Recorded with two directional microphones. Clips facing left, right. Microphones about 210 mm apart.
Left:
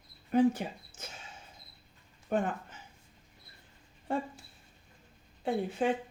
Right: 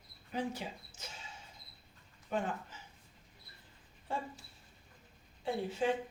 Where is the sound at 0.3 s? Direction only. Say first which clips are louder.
Left 12 dB; 55° left (ahead or behind).